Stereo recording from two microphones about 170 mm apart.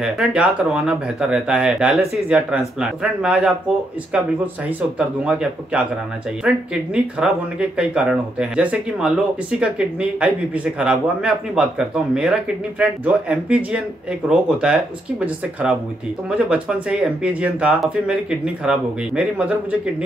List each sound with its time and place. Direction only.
0.0 s speech: 5° right (ahead or behind)
4.6 s speech: 5° right (ahead or behind)